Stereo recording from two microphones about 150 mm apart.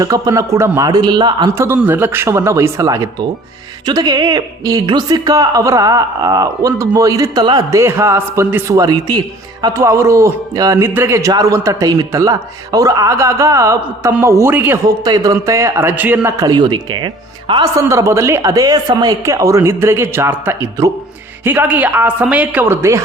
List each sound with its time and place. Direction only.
0.0 s a woman's voice: 25° right (ahead or behind)
1.5 s a woman's voice: 15° right (ahead or behind)
14.8 s a woman's voice: 25° right (ahead or behind)
16.5 s a woman's voice: 30° right (ahead or behind)